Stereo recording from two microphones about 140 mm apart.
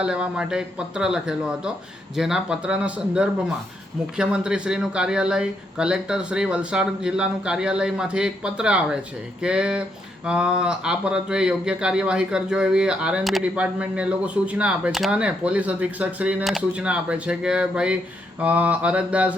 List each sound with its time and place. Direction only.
0.0 s a man's voice: 5° right (ahead or behind)